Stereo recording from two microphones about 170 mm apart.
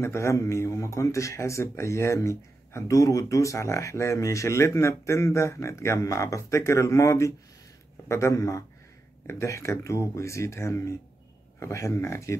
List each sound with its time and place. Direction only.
0.0 s speech: 15° left (ahead or behind)